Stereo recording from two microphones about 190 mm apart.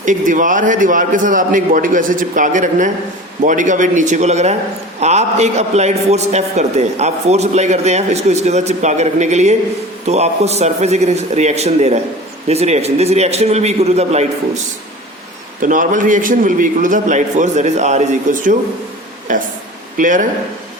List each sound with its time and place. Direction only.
0.0 s a man's voice: 45° right (ahead or behind)
15.6 s a man's voice: 45° right (ahead or behind)